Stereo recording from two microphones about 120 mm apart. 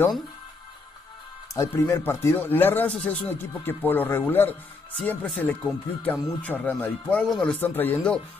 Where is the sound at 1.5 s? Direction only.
20° left (ahead or behind).